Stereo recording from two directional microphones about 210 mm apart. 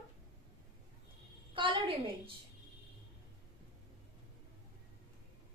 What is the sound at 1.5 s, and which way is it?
Speech, 25° right (ahead or behind).